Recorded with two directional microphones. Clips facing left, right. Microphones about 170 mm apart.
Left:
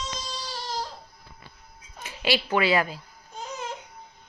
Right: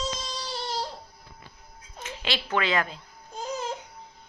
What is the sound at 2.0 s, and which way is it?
A woman's voice, 10° left (ahead or behind).